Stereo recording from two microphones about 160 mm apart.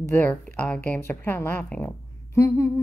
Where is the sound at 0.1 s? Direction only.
10° left (ahead or behind).